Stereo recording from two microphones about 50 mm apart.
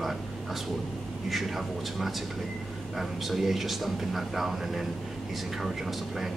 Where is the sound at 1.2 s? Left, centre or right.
Centre.